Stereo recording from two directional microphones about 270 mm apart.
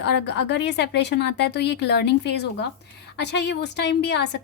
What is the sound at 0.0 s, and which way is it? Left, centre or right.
A woman's voice, left.